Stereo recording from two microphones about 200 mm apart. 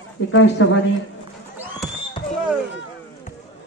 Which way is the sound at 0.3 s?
70° left (ahead or behind).